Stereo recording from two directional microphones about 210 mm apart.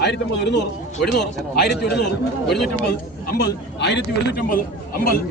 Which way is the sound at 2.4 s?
Centre (ahead or behind).